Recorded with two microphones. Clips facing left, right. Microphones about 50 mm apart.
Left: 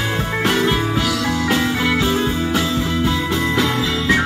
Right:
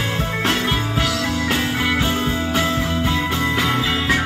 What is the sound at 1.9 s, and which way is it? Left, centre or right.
Music, centre.